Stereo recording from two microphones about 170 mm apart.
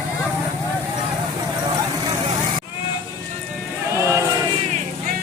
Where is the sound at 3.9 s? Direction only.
15° right (ahead or behind).